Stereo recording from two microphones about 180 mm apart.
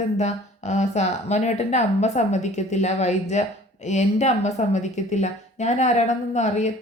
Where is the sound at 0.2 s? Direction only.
40° left (ahead or behind).